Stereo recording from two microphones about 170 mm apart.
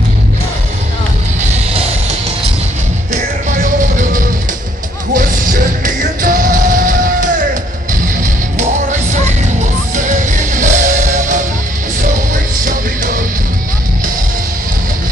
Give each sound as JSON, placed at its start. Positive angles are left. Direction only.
{"t": 3.1, "sound": "music", "side_deg": -45}
{"t": 12.6, "sound": "music", "side_deg": -50}